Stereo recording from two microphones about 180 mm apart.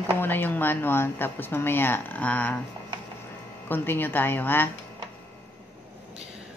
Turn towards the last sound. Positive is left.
turn(degrees=10)  # may be behind; listen again after turning